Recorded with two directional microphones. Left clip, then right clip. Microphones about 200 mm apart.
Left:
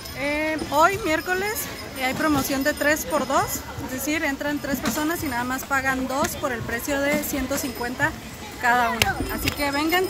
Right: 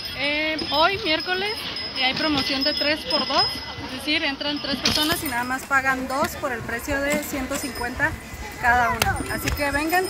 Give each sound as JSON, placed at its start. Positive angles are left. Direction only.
{"t": 0.4, "sound": "a sound", "side_deg": 5}
{"t": 1.1, "sound": "speech", "side_deg": 10}
{"t": 8.6, "sound": "speech", "side_deg": 5}
{"t": 9.6, "sound": "speech", "side_deg": -20}